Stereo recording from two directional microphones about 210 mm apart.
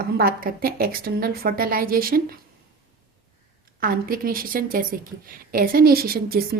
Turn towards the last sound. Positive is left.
turn(degrees=-45)  # may be behind; listen again after turning